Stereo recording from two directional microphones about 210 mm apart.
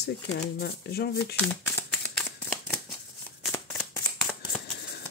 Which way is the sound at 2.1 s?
5° left (ahead or behind).